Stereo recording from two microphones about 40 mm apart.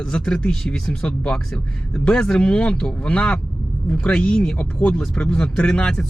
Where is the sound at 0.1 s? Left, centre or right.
Left.